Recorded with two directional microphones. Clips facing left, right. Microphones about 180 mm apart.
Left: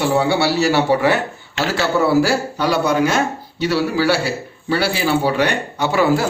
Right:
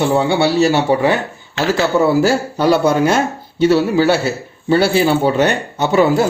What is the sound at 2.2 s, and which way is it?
Speech, 25° right (ahead or behind).